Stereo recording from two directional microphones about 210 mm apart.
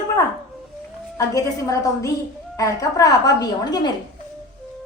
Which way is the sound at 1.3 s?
15° left (ahead or behind).